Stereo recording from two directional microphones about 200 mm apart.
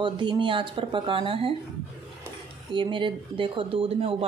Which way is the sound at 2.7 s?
25° right (ahead or behind).